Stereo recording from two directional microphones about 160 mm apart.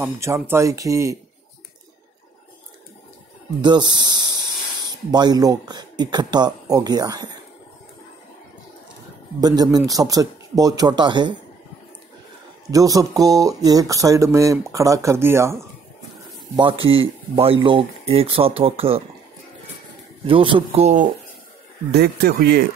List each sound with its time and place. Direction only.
0.0 s speech: 15° right (ahead or behind)
3.6 s speech: 25° right (ahead or behind)
9.4 s speech: 25° right (ahead or behind)
12.7 s speech: 20° right (ahead or behind)
16.8 s speech: 35° right (ahead or behind)
20.2 s speech: 35° right (ahead or behind)
21.9 s speech: 85° right